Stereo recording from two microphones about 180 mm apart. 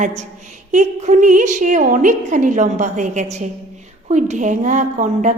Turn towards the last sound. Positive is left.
turn(degrees=-45)  # may be behind; listen again after turning